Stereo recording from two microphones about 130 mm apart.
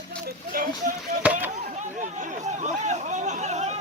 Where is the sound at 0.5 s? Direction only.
90° right.